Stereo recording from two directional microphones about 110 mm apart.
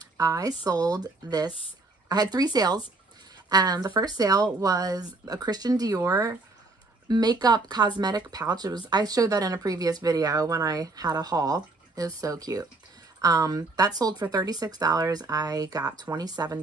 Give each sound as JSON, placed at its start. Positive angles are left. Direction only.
{"t": 0.2, "sound": "speech", "side_deg": -35}